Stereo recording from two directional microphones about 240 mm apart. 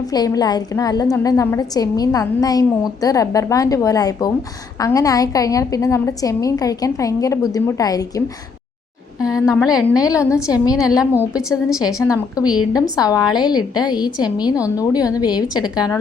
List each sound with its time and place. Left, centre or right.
0.1 s a woman's voice: centre
9.2 s a woman's voice: centre
9.9 s a woman's voice: centre
11.0 s a woman's voice: centre
12.0 s a woman's voice: centre